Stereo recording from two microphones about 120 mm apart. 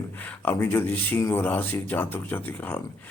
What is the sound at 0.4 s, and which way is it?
A man's voice, 20° left (ahead or behind).